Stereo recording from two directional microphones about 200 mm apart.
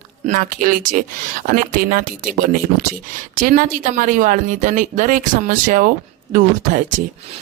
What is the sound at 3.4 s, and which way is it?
Speech, 40° right (ahead or behind).